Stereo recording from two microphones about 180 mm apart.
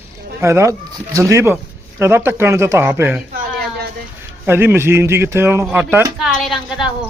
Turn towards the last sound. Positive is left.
turn(degrees=0)  # may be behind; listen again after turning